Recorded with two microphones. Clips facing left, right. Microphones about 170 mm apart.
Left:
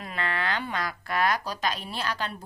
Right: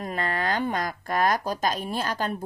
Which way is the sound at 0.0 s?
45° right (ahead or behind).